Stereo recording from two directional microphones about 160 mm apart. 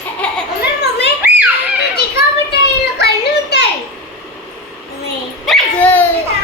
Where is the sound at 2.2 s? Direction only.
90° left.